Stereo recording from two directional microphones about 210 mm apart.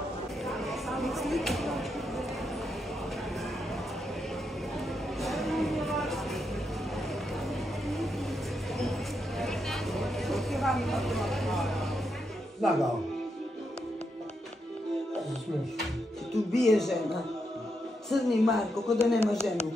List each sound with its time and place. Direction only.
0.5 s a sound: centre (ahead or behind)
5.2 s music: centre (ahead or behind)
9.4 s vehicle: centre (ahead or behind)
12.6 s music: centre (ahead or behind)
16.3 s music: centre (ahead or behind)
18.1 s speech: centre (ahead or behind)